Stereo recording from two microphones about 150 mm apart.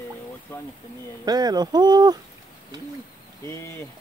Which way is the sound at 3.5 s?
20° left (ahead or behind).